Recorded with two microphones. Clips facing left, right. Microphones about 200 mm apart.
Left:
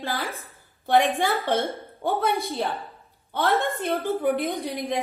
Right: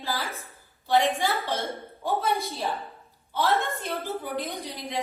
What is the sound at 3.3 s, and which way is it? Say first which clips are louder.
A woman's voice: left 2 dB; 55° left (ahead or behind).